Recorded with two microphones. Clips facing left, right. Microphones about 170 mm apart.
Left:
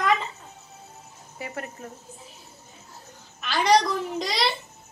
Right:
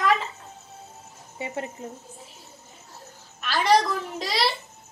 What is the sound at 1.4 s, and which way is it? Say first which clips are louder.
Speech: right 3 dB; 20° right (ahead or behind).